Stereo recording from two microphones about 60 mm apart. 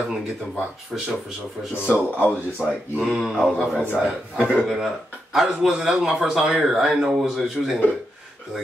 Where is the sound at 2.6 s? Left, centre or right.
Centre.